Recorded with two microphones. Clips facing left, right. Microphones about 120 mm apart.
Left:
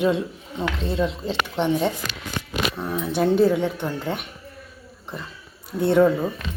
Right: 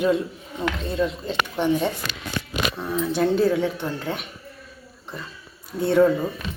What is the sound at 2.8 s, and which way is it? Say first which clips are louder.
Speech: right 1 dB; 10° left (ahead or behind).